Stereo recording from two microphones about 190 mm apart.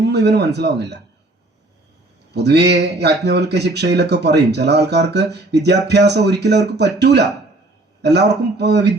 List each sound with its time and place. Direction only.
0.0 s speech: 60° right (ahead or behind)
2.3 s speech: 60° right (ahead or behind)